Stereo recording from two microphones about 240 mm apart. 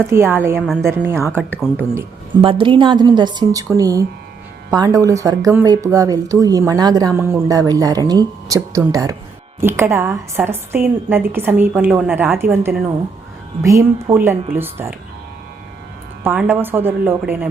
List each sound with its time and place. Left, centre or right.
0.1 s a woman's voice: centre
2.4 s a woman's voice: right
16.2 s a woman's voice: centre